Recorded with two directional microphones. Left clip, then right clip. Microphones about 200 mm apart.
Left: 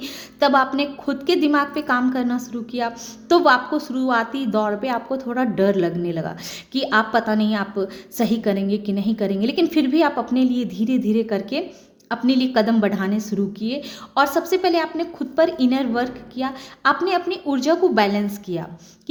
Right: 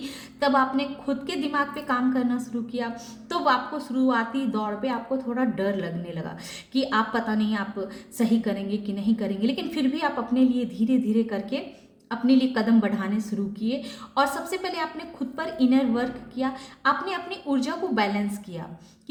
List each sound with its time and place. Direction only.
0.0 s a woman's voice: 40° left (ahead or behind)